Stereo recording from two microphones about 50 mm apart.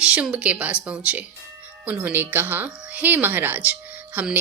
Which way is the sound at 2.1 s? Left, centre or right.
Right.